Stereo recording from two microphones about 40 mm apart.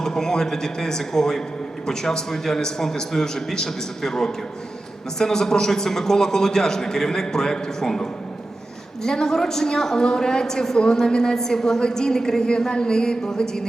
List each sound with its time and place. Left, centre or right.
0.0 s a woman's voice: centre
9.0 s a woman's voice: centre